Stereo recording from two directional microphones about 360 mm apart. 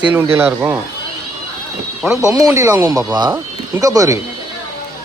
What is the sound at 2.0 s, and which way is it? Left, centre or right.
Speech, centre.